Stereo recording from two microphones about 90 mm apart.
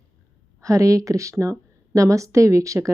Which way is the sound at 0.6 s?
35° right (ahead or behind).